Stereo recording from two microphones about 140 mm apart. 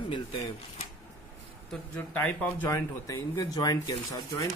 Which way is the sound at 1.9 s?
10° left (ahead or behind).